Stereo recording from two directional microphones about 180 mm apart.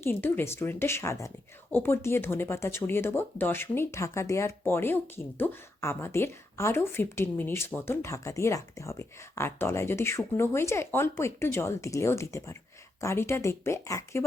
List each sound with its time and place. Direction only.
0.0 s speech: 10° left (ahead or behind)